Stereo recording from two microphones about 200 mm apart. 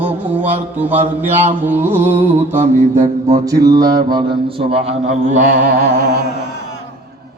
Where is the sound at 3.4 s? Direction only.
15° right (ahead or behind).